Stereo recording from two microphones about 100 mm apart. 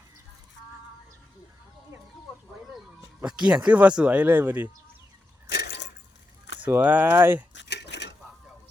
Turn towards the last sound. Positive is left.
turn(degrees=-20)  # may be behind; listen again after turning